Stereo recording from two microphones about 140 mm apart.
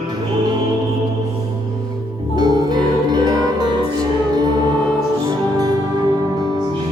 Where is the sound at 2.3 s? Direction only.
30° right (ahead or behind).